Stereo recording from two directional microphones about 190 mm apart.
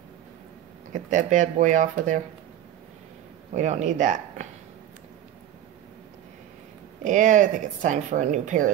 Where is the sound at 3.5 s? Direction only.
40° right (ahead or behind).